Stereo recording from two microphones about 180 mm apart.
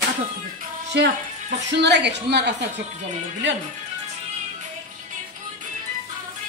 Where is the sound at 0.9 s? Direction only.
75° right (ahead or behind).